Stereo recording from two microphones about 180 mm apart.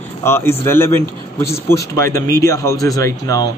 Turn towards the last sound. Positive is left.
turn(degrees=15)  # may be behind; listen again after turning